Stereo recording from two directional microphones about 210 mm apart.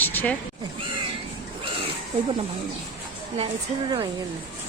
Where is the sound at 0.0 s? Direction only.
10° left (ahead or behind).